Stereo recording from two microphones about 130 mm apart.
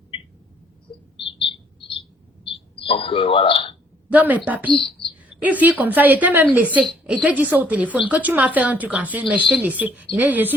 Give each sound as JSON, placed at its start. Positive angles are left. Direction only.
{"t": 0.9, "sound": "bird", "side_deg": 40}
{"t": 2.4, "sound": "a sound", "side_deg": 45}
{"t": 4.1, "sound": "a woman's voice", "side_deg": -10}
{"t": 9.4, "sound": "speech", "side_deg": 0}
{"t": 9.6, "sound": "a woman's voice", "side_deg": -10}